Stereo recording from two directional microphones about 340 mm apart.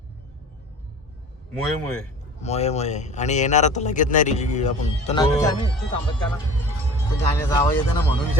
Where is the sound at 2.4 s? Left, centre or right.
Centre.